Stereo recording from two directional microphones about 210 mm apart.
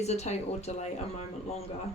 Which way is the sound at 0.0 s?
30° left (ahead or behind).